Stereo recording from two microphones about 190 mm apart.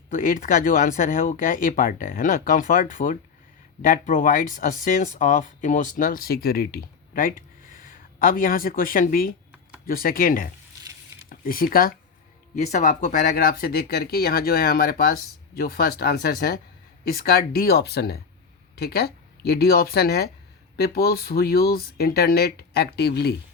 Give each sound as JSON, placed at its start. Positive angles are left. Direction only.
{"t": 0.1, "sound": "speech", "side_deg": 45}
{"t": 12.5, "sound": "speech", "side_deg": 35}